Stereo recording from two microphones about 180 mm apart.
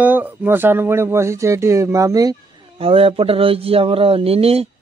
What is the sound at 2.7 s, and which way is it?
Speech, 30° right (ahead or behind).